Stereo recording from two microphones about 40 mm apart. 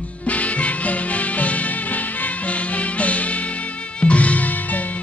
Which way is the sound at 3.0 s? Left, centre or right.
Left.